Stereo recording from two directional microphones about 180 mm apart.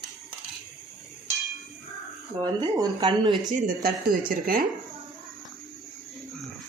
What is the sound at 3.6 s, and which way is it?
Speech, 55° right (ahead or behind).